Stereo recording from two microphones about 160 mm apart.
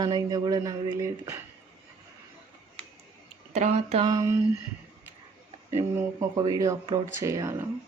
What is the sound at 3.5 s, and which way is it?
Speech, 45° right (ahead or behind).